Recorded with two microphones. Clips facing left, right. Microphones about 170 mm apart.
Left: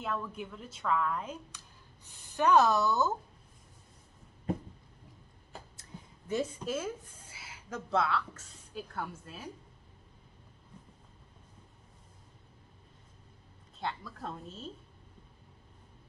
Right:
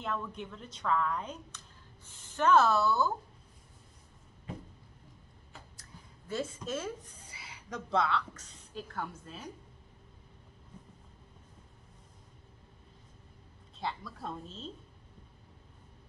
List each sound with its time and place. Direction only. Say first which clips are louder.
0.0 s a woman's voice: left 1 dB; 5° left (ahead or behind)
6.2 s a woman's voice: left 3 dB; 15° left (ahead or behind)
13.7 s a woman's voice: even; centre (ahead or behind)